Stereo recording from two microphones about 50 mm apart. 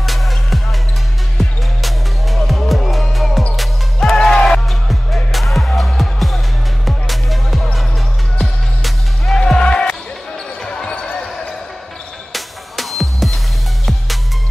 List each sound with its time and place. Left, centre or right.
0.0 s music: centre
1.4 s basketball bounce: centre
2.7 s music: centre
4.0 s music: centre
4.6 s music: centre
9.6 s basketball bounce: left
12.3 s music: centre